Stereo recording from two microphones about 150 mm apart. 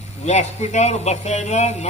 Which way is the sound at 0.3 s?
50° left (ahead or behind).